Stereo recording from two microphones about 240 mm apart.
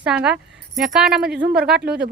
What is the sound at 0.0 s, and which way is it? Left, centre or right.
Speech, centre.